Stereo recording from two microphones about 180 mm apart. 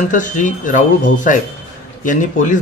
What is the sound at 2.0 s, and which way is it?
Speech, 45° left (ahead or behind).